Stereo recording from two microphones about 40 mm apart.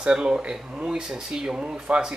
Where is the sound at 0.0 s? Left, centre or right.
Right.